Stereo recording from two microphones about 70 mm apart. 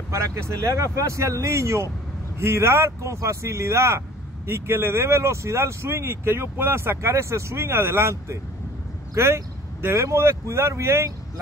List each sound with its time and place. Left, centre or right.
0.1 s speech: right